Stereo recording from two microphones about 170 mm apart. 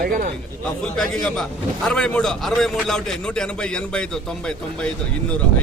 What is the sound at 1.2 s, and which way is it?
A man's voice, 5° left (ahead or behind).